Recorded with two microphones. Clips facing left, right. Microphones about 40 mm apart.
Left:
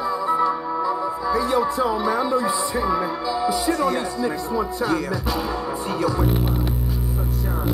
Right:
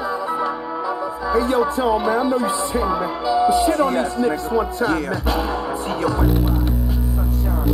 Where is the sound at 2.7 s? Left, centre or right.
Centre.